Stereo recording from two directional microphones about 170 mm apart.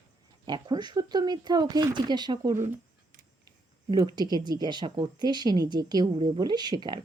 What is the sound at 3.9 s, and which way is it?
Speech, 25° right (ahead or behind).